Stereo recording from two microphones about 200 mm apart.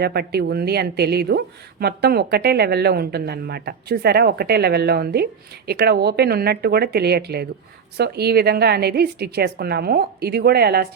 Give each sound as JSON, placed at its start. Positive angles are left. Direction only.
{"t": 0.0, "sound": "speech", "side_deg": -55}